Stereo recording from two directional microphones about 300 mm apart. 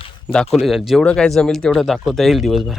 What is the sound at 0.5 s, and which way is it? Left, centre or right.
Speech, centre.